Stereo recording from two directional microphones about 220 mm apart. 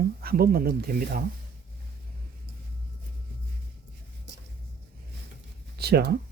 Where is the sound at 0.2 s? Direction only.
45° right (ahead or behind).